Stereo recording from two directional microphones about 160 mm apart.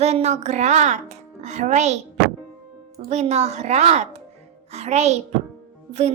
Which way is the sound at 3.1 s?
45° right (ahead or behind).